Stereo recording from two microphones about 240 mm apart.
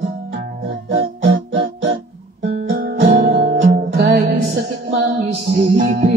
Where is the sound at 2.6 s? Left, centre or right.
Right.